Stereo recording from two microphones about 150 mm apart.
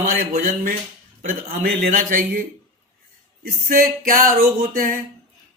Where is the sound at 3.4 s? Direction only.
75° right (ahead or behind).